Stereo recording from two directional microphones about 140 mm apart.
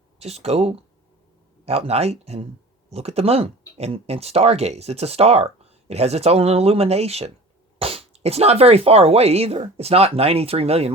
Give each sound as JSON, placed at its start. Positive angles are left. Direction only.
{"t": 0.2, "sound": "speech", "side_deg": -50}